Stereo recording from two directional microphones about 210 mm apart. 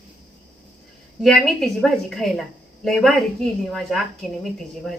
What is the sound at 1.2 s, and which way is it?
A woman's voice, centre (ahead or behind).